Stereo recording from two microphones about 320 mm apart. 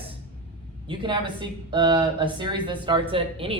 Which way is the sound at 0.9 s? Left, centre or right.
Centre.